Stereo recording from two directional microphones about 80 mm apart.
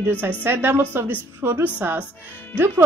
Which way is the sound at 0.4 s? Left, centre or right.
Right.